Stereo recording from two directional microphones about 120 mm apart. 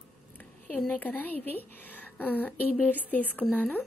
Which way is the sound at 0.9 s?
15° left (ahead or behind).